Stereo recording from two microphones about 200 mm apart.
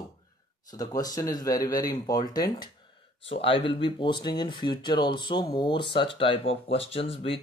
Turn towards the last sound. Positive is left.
turn(degrees=30)  # may be behind; listen again after turning